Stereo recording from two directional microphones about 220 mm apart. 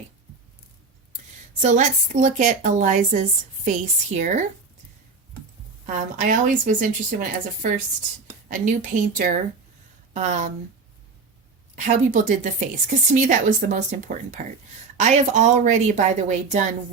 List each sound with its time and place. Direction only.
1.6 s a woman's voice: 35° right (ahead or behind)
5.8 s a woman's voice: 35° right (ahead or behind)
11.9 s a woman's voice: 35° right (ahead or behind)